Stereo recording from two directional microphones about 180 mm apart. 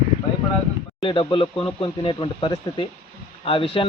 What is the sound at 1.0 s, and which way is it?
A man's voice, 25° left (ahead or behind).